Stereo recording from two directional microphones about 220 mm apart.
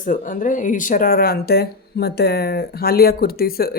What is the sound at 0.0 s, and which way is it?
Speech, 35° left (ahead or behind).